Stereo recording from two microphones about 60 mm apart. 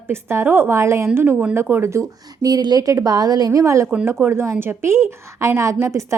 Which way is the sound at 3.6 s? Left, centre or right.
Right.